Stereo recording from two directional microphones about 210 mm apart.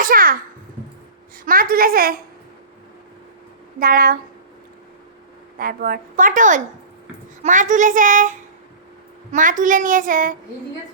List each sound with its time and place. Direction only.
0.0 s babbling: 40° right (ahead or behind)
1.5 s speech: 45° right (ahead or behind)
3.8 s speech: 45° right (ahead or behind)
5.5 s a woman's voice: 45° right (ahead or behind)